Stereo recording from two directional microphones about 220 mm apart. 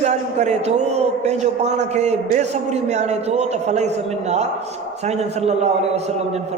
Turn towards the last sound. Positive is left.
turn(degrees=-30)  # may be behind; listen again after turning